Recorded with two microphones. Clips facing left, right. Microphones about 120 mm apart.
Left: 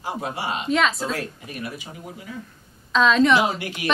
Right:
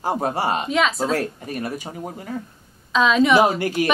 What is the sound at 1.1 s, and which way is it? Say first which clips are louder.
Speech: right 7 dB; 45° right (ahead or behind).